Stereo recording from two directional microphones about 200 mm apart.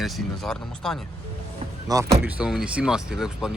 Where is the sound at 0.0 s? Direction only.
5° left (ahead or behind).